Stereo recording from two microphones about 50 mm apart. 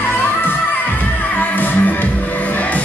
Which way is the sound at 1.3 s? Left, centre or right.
Left.